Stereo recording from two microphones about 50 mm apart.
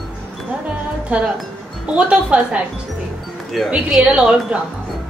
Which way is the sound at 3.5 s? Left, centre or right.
Centre.